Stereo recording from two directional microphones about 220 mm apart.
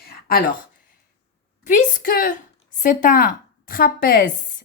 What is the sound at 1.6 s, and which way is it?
A woman's voice, 35° left (ahead or behind).